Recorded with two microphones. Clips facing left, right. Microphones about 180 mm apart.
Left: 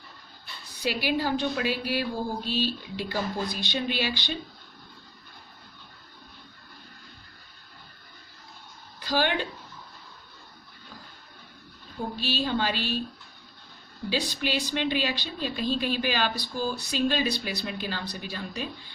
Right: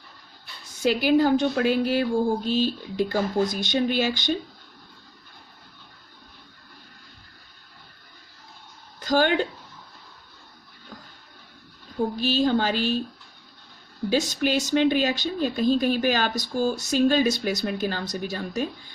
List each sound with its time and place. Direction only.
0.8 s speech: 50° right (ahead or behind)
9.0 s speech: 45° right (ahead or behind)
12.2 s speech: 45° right (ahead or behind)
14.1 s speech: 45° right (ahead or behind)